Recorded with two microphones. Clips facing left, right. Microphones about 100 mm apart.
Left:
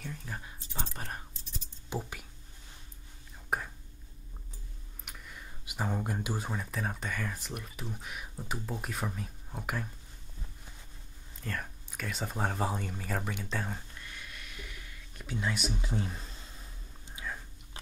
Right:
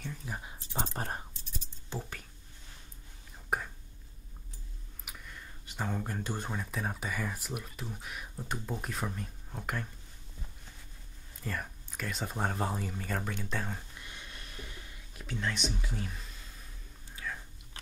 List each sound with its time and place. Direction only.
0.0 s speech: 5° right (ahead or behind)
0.7 s speech: 35° right (ahead or behind)
1.9 s speech: 10° left (ahead or behind)
3.4 s whispering: centre (ahead or behind)
5.0 s speech: centre (ahead or behind)
11.4 s speech: 5° right (ahead or behind)
14.0 s snort: 25° right (ahead or behind)
15.4 s speech: 5° left (ahead or behind)
15.8 s speech: 25° left (ahead or behind)
17.1 s biting: 15° left (ahead or behind)